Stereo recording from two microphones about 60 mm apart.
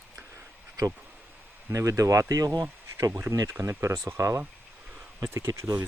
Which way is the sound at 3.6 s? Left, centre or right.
Right.